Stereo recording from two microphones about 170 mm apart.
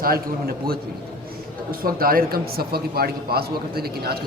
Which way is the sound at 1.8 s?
60° right (ahead or behind).